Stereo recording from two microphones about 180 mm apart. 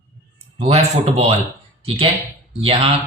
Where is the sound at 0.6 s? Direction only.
35° right (ahead or behind).